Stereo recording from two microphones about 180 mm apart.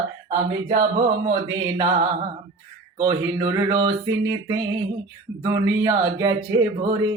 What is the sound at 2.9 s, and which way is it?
Speech, 20° right (ahead or behind).